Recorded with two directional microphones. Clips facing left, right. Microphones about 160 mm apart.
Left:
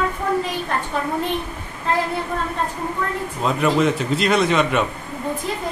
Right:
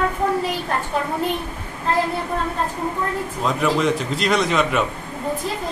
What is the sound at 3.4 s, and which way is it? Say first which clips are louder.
A man's voice: left 2 dB; centre (ahead or behind).